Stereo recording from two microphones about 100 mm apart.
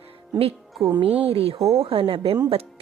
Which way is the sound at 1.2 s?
75° right (ahead or behind).